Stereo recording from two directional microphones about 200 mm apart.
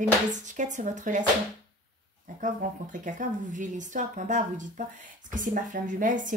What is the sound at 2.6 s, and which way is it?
A woman's voice, 45° right (ahead or behind).